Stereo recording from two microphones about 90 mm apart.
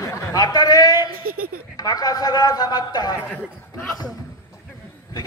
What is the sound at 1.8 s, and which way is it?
A man's voice, 45° left (ahead or behind).